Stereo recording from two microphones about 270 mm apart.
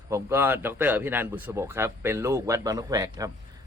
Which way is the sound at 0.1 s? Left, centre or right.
Centre.